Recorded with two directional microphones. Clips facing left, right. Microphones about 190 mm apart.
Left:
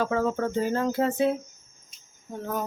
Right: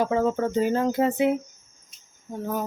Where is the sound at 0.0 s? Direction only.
20° right (ahead or behind).